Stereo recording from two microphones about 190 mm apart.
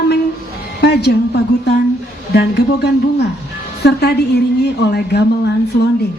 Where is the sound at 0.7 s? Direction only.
60° left (ahead or behind).